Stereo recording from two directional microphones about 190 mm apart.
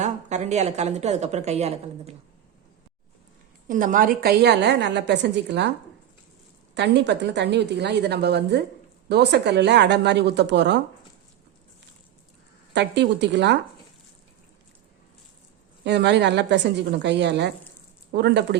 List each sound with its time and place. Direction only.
0.0 s a woman's voice: 40° right (ahead or behind)
3.7 s a woman's voice: 45° right (ahead or behind); by 5.7 s 65° right (ahead or behind)
6.7 s a woman's voice: 65° right (ahead or behind)
12.7 s a woman's voice: 65° right (ahead or behind)
15.8 s a woman's voice: 65° right (ahead or behind)